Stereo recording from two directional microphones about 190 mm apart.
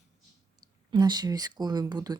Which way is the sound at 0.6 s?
20° right (ahead or behind).